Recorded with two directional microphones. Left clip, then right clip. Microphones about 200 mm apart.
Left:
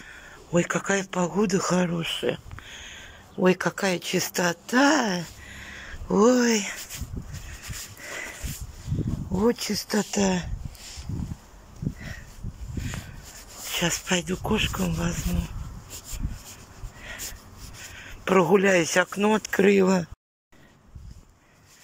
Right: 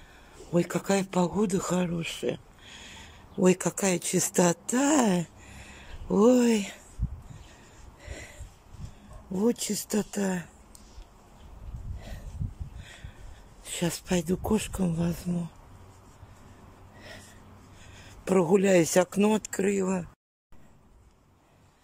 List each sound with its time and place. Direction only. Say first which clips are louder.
0.0 s speech: left 6 dB; 15° right (ahead or behind)
8.0 s a sound: left 9 dB; 20° right (ahead or behind)
9.4 s speech: left 4 dB; 10° right (ahead or behind)
13.7 s speech: left 6 dB; 20° right (ahead or behind)
17.9 s speech: left 4 dB; 20° right (ahead or behind)
19.5 s speech: left 8 dB; centre (ahead or behind)